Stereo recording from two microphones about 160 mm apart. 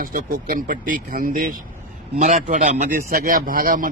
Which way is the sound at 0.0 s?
60° right (ahead or behind).